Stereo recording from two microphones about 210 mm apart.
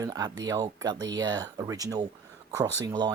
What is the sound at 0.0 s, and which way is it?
Speech, 15° right (ahead or behind).